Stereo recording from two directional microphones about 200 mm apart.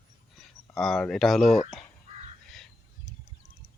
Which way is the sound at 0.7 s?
Centre (ahead or behind).